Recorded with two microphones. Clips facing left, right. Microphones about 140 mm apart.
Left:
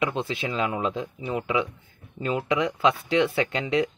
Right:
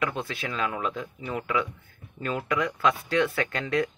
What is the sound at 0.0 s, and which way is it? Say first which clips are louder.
Speech: left 3 dB; 20° left (ahead or behind).